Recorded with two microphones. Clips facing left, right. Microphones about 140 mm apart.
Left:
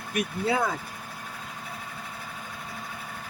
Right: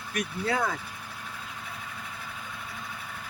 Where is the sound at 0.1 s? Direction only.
20° left (ahead or behind).